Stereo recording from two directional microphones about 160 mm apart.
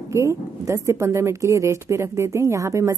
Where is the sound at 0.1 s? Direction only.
20° right (ahead or behind).